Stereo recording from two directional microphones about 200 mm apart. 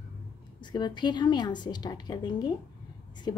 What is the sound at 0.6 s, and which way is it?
A woman's voice, 20° left (ahead or behind).